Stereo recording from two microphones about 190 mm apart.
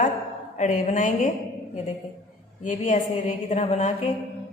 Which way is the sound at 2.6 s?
40° left (ahead or behind).